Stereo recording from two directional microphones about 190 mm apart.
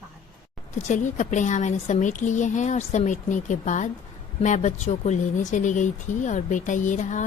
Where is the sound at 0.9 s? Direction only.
40° left (ahead or behind).